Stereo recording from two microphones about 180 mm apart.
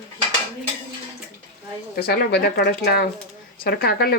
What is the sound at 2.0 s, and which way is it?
Speech, 60° left (ahead or behind).